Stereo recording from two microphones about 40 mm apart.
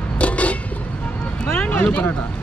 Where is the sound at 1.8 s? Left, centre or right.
Left.